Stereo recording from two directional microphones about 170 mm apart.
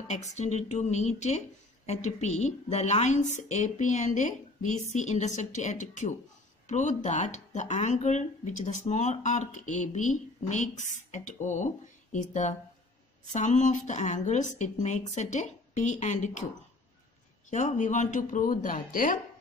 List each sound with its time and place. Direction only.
0.1 s a woman's voice: 40° left (ahead or behind)
17.5 s speech: 45° left (ahead or behind)